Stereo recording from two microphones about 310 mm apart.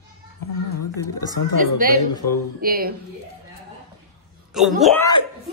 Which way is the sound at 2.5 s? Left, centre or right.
Right.